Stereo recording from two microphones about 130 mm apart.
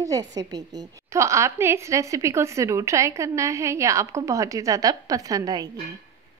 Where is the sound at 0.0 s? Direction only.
30° right (ahead or behind).